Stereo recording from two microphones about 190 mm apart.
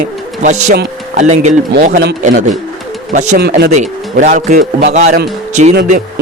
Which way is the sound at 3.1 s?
45° right (ahead or behind).